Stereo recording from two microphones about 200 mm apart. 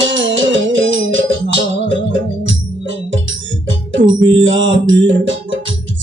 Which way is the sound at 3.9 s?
65° right (ahead or behind).